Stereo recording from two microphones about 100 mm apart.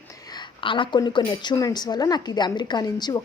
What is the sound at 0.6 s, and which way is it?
A woman's voice, 55° left (ahead or behind).